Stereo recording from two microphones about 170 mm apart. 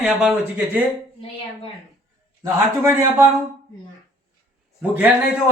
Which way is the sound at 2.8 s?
15° right (ahead or behind).